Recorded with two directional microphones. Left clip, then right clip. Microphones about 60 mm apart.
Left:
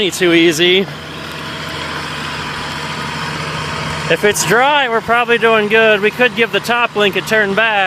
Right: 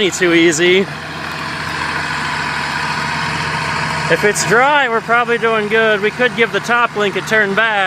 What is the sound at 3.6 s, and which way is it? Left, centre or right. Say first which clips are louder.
Vehicle: right 3 dB; right.